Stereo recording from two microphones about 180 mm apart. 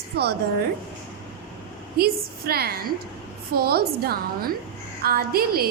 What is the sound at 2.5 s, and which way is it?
A woman's voice, 60° right (ahead or behind).